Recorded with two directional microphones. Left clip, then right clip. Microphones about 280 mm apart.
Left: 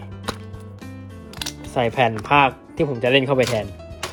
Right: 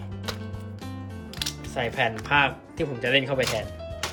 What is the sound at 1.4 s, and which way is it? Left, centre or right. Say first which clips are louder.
Speech: left 7 dB; centre.